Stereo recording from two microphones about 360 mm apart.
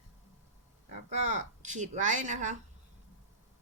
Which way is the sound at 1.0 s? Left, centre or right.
Centre.